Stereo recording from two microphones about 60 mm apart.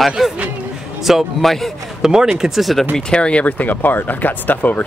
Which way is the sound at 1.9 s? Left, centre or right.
Centre.